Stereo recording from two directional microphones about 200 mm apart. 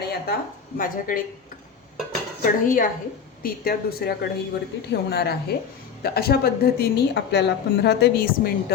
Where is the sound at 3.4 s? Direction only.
50° left (ahead or behind).